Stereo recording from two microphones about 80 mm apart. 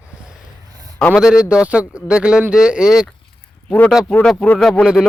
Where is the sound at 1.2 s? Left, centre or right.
Centre.